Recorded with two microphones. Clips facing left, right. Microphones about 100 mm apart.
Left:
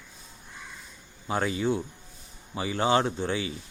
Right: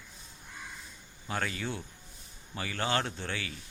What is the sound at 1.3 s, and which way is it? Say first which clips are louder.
Speech: left 8 dB; 20° left (ahead or behind).